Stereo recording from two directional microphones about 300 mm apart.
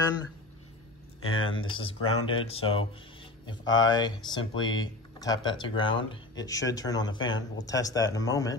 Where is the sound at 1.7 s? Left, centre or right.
Centre.